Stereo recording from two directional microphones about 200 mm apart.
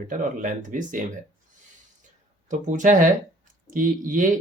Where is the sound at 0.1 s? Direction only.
40° right (ahead or behind).